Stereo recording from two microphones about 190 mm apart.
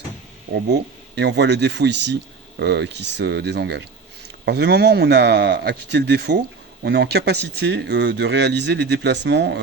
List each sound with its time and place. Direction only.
0.5 s speech: 65° right (ahead or behind)